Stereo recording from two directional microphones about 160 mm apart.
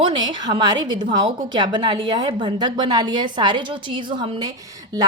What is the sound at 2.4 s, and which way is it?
A woman's voice, 25° right (ahead or behind).